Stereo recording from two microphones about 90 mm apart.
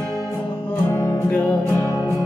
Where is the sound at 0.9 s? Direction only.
35° left (ahead or behind).